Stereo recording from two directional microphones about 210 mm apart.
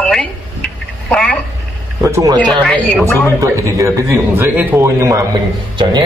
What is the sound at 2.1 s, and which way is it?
Speech, 15° right (ahead or behind).